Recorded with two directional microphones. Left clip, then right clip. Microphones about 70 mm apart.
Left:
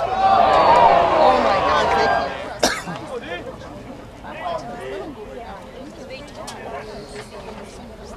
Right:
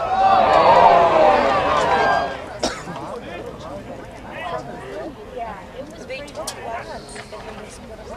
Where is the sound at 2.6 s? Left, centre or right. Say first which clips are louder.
Left 5 dB; left.